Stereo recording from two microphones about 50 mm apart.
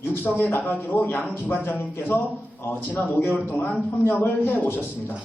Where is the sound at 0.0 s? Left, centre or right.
Left.